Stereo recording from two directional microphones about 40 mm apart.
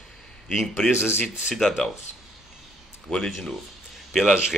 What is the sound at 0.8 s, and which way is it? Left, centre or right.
Speech, centre.